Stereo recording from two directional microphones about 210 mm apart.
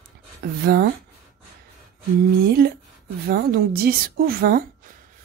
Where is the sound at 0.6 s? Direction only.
45° right (ahead or behind).